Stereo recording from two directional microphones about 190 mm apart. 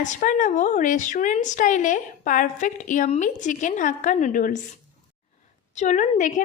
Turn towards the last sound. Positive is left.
turn(degrees=40)  # may be behind; listen again after turning